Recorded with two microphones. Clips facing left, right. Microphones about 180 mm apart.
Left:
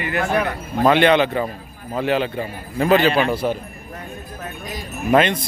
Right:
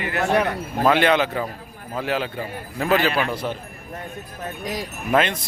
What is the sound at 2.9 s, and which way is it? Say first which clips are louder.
Speech: left 4 dB; 25° left (ahead or behind).